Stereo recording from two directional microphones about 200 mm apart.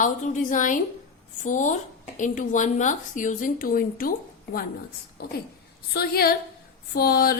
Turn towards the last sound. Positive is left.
turn(degrees=50)  # may be behind; listen again after turning